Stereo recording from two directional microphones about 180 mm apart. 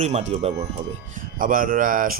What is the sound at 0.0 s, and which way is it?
Speech, 40° right (ahead or behind).